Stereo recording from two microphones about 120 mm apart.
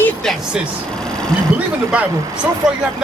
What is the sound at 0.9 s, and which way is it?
Speech, 5° left (ahead or behind).